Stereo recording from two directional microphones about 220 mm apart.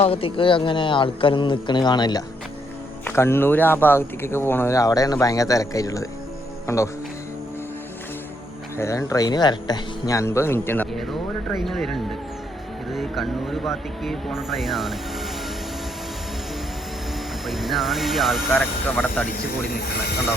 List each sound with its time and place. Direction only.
0.0 s speech: 25° left (ahead or behind)
8.8 s speech: 15° left (ahead or behind)
17.4 s speech: centre (ahead or behind)